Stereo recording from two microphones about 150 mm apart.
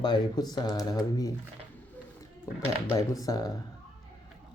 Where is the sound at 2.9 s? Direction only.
25° left (ahead or behind).